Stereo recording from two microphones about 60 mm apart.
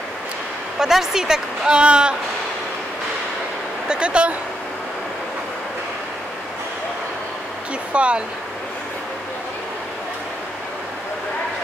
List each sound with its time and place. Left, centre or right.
0.7 s a woman's voice: centre
3.9 s a woman's voice: centre
7.9 s speech: centre